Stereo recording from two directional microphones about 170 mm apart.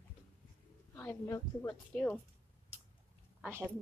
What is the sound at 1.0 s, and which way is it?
A woman's voice, 10° left (ahead or behind).